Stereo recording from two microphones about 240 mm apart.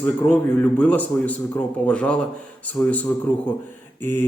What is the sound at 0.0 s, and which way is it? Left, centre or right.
A man's voice, centre.